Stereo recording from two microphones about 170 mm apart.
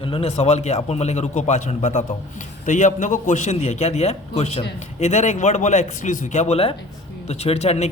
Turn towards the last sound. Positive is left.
turn(degrees=40)  # may be behind; listen again after turning